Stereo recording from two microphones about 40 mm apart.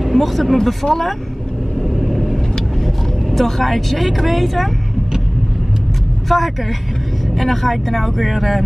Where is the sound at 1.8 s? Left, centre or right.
Centre.